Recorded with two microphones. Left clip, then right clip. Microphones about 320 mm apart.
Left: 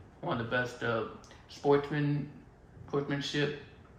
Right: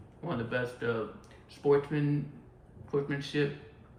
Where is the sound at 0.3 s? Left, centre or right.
Centre.